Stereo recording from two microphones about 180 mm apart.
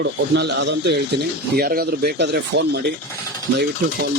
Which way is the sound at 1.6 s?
60° right (ahead or behind).